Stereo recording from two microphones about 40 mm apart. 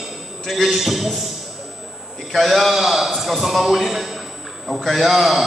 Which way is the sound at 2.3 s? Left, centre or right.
Centre.